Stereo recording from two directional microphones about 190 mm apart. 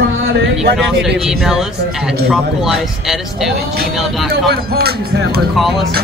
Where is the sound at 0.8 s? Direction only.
Centre (ahead or behind).